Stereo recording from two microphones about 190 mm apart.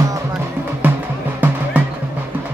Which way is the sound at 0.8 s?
10° right (ahead or behind).